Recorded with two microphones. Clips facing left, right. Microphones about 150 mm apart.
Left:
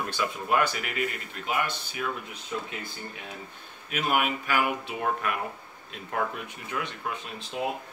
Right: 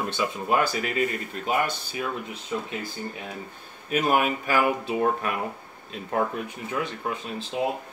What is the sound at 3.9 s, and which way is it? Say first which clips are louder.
Speech: right 4 dB; 40° right (ahead or behind).